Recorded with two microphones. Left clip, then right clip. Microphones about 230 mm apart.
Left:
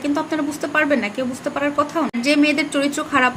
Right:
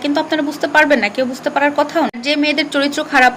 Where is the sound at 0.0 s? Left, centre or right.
Centre.